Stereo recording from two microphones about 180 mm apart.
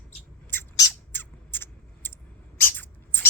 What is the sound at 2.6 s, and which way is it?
Rodents, 10° left (ahead or behind).